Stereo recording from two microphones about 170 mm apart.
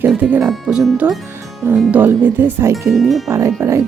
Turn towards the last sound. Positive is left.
turn(degrees=-15)  # may be behind; listen again after turning